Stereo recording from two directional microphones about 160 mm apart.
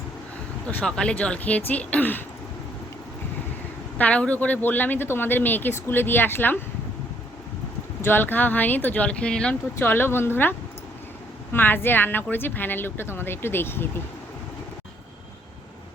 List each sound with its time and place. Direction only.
0.7 s a woman's voice: 5° left (ahead or behind)
3.9 s a woman's voice: 10° left (ahead or behind)
8.0 s a woman's voice: 15° left (ahead or behind)
11.5 s a woman's voice: 15° left (ahead or behind)